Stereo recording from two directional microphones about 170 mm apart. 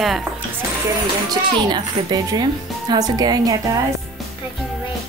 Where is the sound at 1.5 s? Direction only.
25° right (ahead or behind).